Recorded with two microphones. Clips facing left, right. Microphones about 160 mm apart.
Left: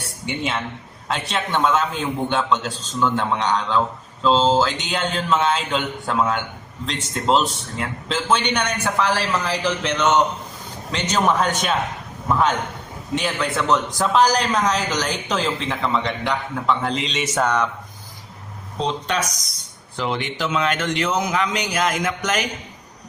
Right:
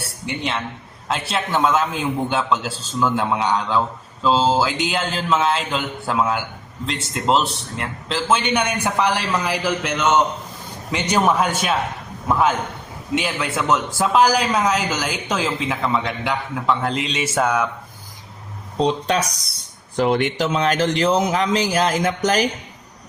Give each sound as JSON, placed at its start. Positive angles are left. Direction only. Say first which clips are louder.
{"t": 0.0, "sound": "a sound", "louder": "even", "side_deg": 0}
{"t": 1.0, "sound": "a man's voice", "louder": "right 1 dB", "side_deg": 0}
{"t": 18.8, "sound": "speech", "louder": "right 4 dB", "side_deg": -35}
{"t": 20.1, "sound": "speech", "louder": "right 5 dB", "side_deg": -50}
{"t": 20.5, "sound": "a man's voice", "louder": "even", "side_deg": -35}